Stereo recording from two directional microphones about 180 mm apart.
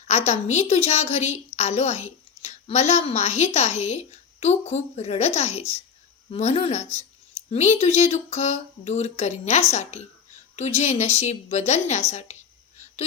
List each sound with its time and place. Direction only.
0.1 s a woman's voice: 40° left (ahead or behind)